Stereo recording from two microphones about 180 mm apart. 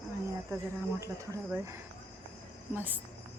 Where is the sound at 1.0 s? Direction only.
15° right (ahead or behind).